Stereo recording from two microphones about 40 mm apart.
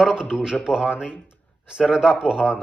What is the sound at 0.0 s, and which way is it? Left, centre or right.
Speech, centre.